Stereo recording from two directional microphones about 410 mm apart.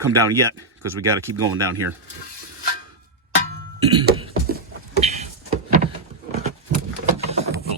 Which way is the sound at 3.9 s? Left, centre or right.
Centre.